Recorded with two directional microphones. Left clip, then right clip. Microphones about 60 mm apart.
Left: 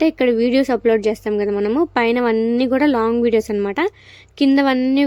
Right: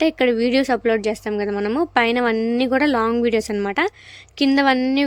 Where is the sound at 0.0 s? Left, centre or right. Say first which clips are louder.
Left 2 dB; left.